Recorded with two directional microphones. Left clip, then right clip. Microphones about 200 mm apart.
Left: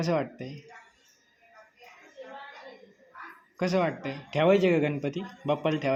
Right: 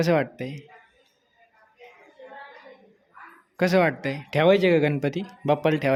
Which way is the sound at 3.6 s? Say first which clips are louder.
Right 6 dB; 40° right (ahead or behind).